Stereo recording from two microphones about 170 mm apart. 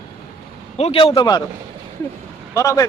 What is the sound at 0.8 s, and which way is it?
Speech, 35° left (ahead or behind).